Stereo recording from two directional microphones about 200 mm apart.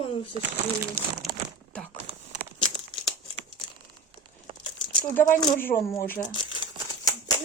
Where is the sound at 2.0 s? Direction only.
30° right (ahead or behind).